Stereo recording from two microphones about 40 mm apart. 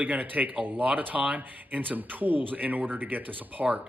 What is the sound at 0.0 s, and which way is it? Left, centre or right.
A man's voice, right.